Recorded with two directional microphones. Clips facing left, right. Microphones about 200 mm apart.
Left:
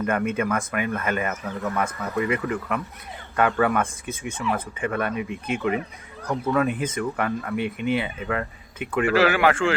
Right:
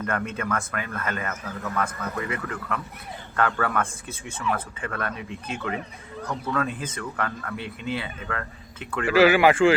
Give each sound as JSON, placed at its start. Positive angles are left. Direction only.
{"t": 0.0, "sound": "speech", "side_deg": 15}
{"t": 9.0, "sound": "speech", "side_deg": -5}